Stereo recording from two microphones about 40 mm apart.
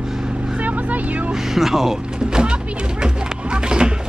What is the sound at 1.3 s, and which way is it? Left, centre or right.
Speech, centre.